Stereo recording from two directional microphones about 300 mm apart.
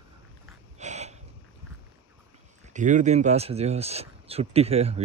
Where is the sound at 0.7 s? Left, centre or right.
Right.